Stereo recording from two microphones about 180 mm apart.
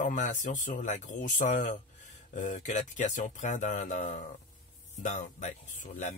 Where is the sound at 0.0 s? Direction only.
45° left (ahead or behind).